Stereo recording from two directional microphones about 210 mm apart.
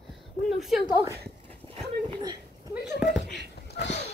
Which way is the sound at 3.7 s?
55° left (ahead or behind).